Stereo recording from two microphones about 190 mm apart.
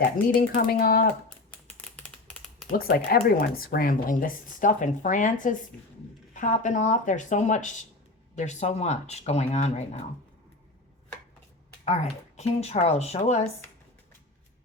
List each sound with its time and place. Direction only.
0.3 s speech: 50° left (ahead or behind)
2.7 s speech: 55° left (ahead or behind); by 10.0 s 35° left (ahead or behind)
11.9 s speech: 35° left (ahead or behind)